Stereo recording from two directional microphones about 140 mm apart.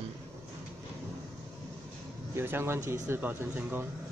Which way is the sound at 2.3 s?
15° right (ahead or behind).